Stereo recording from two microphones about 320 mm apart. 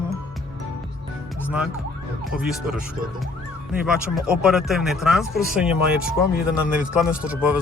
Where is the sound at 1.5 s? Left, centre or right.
Centre.